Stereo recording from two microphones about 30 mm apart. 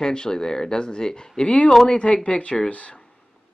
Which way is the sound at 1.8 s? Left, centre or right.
Left.